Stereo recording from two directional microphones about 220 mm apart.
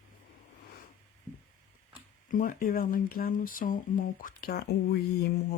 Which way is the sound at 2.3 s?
35° left (ahead or behind).